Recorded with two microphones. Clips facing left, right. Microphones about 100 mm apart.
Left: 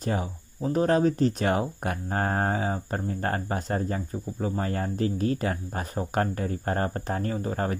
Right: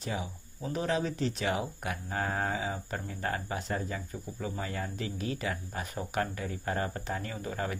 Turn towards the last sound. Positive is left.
turn(degrees=40)  # may be behind; listen again after turning